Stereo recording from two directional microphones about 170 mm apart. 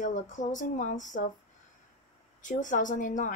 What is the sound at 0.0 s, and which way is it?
Speech, 45° left (ahead or behind).